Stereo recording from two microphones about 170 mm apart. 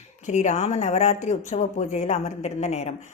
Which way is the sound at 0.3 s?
40° left (ahead or behind).